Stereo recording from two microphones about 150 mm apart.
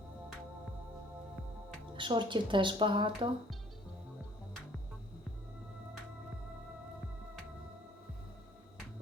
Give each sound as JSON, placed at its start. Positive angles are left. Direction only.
{"t": 2.0, "sound": "speech", "side_deg": -30}